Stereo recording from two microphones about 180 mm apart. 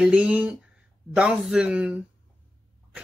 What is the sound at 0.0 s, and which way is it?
Speech, 5° right (ahead or behind).